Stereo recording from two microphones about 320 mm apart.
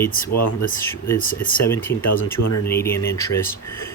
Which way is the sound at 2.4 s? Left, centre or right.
Left.